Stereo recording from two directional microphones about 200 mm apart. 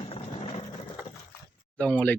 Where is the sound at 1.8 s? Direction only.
5° left (ahead or behind).